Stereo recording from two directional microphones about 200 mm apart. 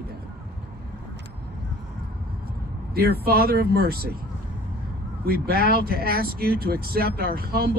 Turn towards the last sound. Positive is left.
turn(degrees=-50)  # may be behind; listen again after turning